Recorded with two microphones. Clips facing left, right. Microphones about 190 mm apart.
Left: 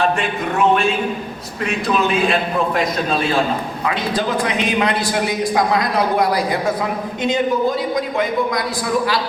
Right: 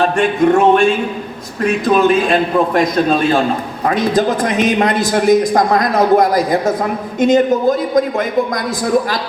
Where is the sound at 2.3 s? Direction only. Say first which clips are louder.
Right 5 dB; 45° right (ahead or behind).